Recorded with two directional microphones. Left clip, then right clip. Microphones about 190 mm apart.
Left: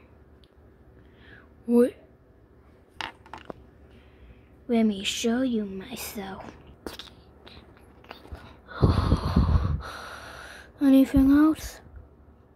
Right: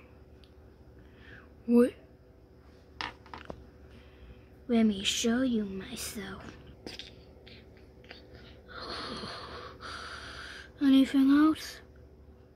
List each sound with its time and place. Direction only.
1.2 s a sound: 10° right (ahead or behind)
4.6 s a woman's voice: centre (ahead or behind)
6.8 s insect: 25° left (ahead or behind)
8.1 s wheeze: 10° left (ahead or behind)